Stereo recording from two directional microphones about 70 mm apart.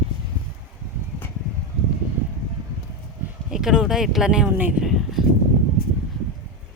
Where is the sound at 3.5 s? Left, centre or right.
Centre.